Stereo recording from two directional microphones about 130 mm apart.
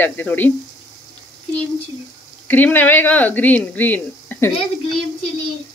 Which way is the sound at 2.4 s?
15° left (ahead or behind).